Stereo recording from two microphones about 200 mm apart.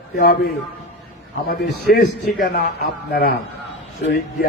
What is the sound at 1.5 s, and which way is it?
A man's voice, 55° left (ahead or behind).